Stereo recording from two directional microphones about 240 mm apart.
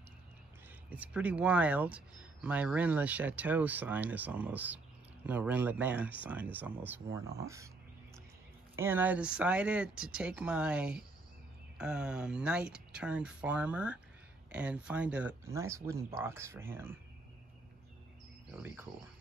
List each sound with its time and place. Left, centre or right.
0.8 s speech: centre
8.7 s speech: centre